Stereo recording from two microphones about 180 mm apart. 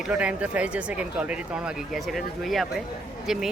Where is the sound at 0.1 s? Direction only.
5° right (ahead or behind).